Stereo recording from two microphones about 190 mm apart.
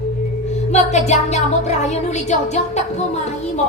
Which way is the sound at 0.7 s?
35° left (ahead or behind).